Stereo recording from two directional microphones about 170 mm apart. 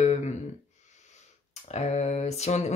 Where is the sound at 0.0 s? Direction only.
45° left (ahead or behind).